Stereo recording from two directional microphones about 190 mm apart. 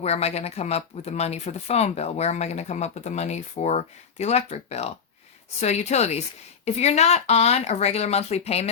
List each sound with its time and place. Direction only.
0.0 s speech: 35° left (ahead or behind)